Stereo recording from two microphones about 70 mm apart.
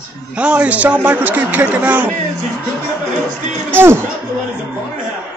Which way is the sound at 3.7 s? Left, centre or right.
Right.